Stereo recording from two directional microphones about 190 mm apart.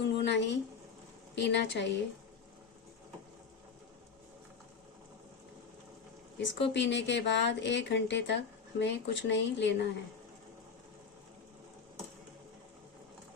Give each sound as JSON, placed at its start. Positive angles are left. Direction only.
{"t": 0.0, "sound": "speech", "side_deg": 65}
{"t": 6.4, "sound": "speech", "side_deg": 70}